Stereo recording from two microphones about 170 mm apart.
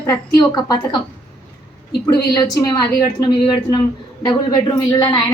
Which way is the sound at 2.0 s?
20° left (ahead or behind).